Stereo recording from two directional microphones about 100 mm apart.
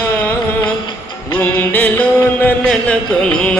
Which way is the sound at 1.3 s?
20° left (ahead or behind).